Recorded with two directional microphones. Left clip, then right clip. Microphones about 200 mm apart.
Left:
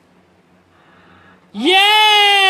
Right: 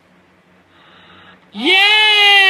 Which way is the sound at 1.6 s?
20° left (ahead or behind).